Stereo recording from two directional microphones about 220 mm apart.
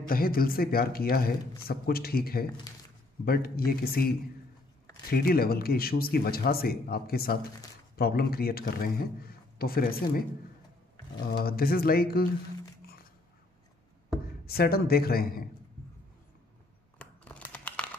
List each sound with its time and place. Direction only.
0.1 s speech: 40° left (ahead or behind)
5.1 s speech: 45° left (ahead or behind)
11.2 s speech: 45° left (ahead or behind)
14.4 s speech: 45° left (ahead or behind)
17.0 s crumpling: 5° left (ahead or behind)